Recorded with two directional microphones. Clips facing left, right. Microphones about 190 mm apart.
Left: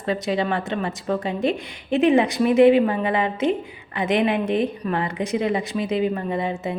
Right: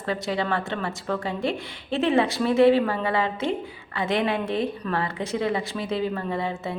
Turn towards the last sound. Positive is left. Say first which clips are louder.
# left 3 dB
turn(degrees=15)  # may be behind; listen again after turning